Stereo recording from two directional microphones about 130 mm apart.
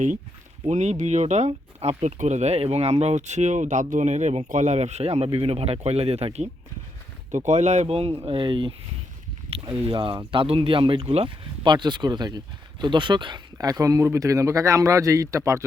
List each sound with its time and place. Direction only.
0.6 s speech: 60° right (ahead or behind)
7.3 s speech: 65° right (ahead or behind); by 15.6 s 25° right (ahead or behind)